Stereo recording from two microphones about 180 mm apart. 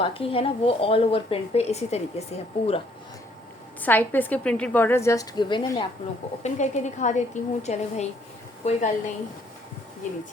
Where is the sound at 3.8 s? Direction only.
10° left (ahead or behind).